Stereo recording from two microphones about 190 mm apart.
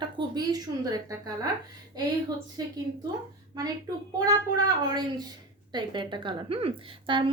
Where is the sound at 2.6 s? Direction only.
20° right (ahead or behind).